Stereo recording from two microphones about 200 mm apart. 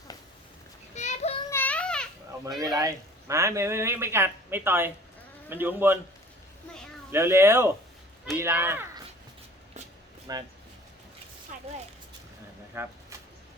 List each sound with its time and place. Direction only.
0.9 s child singing: 35° left (ahead or behind)
1.5 s a sound: 10° left (ahead or behind)
2.7 s a man's voice: 15° right (ahead or behind)
7.1 s a man's voice: 15° right (ahead or behind)
10.3 s speech: 20° right (ahead or behind)
12.7 s a sound: 10° right (ahead or behind)